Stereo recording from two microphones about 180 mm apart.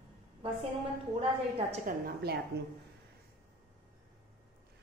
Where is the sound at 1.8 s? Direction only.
60° right (ahead or behind).